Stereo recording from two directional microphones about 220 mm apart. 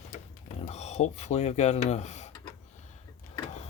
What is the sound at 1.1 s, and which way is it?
Speech, 30° left (ahead or behind).